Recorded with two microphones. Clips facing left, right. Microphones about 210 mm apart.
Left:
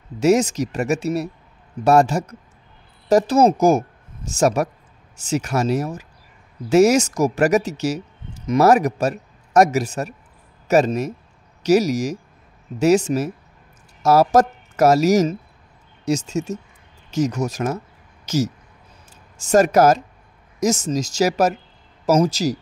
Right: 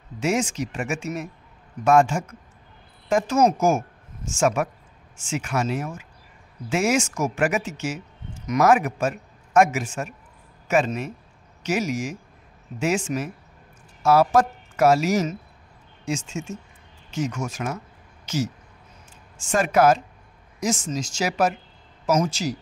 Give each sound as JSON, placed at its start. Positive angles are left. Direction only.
{"t": 0.2, "sound": "speech", "side_deg": 40}
{"t": 18.2, "sound": "a sound", "side_deg": 40}
{"t": 19.3, "sound": "speech", "side_deg": 40}